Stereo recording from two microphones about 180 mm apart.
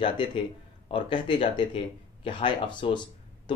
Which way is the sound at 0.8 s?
25° left (ahead or behind).